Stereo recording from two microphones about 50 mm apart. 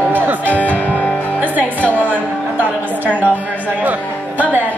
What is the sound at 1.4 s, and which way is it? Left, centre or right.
Music, right.